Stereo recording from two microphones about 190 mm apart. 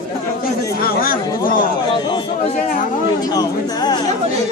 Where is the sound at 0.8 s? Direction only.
50° left (ahead or behind).